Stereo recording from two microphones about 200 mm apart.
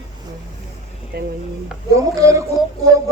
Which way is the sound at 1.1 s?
50° right (ahead or behind).